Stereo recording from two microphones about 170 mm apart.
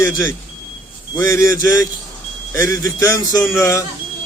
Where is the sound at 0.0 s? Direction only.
15° left (ahead or behind).